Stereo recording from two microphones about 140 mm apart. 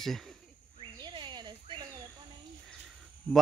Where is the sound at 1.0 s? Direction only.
35° right (ahead or behind).